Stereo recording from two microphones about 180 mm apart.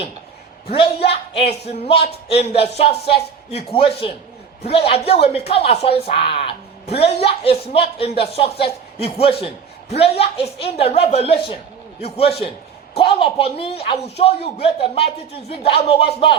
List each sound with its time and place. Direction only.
1.0 s speech: 35° left (ahead or behind)